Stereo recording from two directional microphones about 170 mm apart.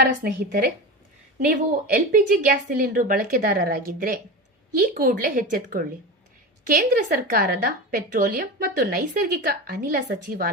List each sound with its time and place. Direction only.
0.2 s a woman's voice: 65° right (ahead or behind)